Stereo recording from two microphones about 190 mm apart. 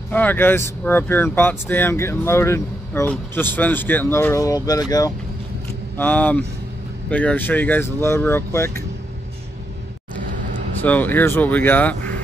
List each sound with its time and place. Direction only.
0.1 s speech: 10° left (ahead or behind)
5.9 s speech: 10° left (ahead or behind)
10.8 s speech: 10° left (ahead or behind)